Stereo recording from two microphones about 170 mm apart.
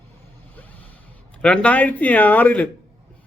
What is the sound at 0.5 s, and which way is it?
Vehicle, 10° left (ahead or behind).